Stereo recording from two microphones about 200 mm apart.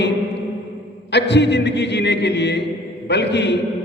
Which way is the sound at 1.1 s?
60° left (ahead or behind).